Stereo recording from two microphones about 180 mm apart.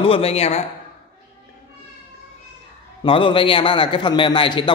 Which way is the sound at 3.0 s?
30° left (ahead or behind).